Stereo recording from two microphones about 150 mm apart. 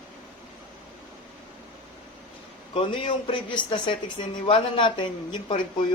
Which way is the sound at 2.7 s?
35° left (ahead or behind).